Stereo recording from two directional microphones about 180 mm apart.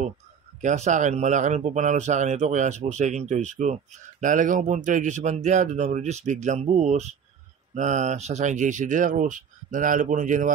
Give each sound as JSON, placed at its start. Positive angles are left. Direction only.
{"t": 0.6, "sound": "speech", "side_deg": -40}